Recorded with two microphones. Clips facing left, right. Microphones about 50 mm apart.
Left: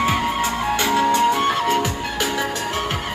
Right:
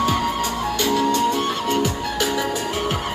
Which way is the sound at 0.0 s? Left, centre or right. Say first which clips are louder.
Left 1 dB; left.